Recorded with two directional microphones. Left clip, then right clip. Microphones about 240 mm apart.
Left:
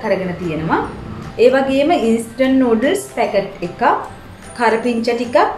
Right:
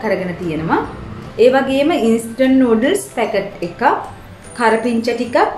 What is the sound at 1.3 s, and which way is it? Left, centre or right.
A woman's voice, centre.